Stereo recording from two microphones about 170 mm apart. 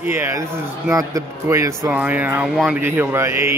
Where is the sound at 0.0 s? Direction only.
15° right (ahead or behind).